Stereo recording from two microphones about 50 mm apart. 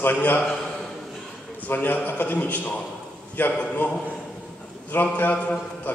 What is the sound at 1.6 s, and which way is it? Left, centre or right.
A man's voice, left.